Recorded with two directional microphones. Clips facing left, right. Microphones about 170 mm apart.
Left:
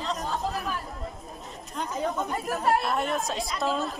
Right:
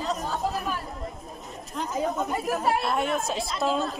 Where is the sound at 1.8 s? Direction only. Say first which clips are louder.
Right 2 dB; 10° right (ahead or behind).